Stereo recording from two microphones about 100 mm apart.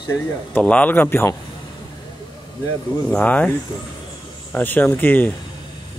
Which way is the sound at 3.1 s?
15° left (ahead or behind).